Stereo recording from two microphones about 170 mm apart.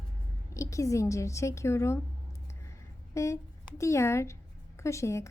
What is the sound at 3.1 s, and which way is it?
A woman's voice, 15° left (ahead or behind).